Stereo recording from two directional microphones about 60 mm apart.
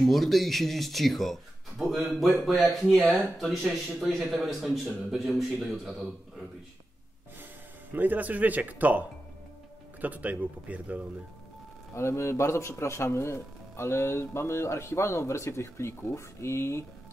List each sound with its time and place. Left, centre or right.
0.0 s speech: centre
7.9 s speech: right
11.9 s a man's voice: left